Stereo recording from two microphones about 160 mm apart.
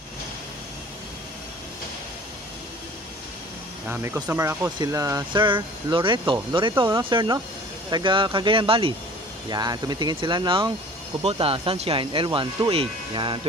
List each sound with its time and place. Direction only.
3.9 s speech: 10° right (ahead or behind); by 13.5 s 30° right (ahead or behind)